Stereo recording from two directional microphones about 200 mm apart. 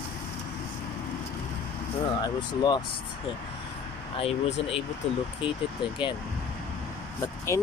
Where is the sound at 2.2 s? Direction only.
20° left (ahead or behind).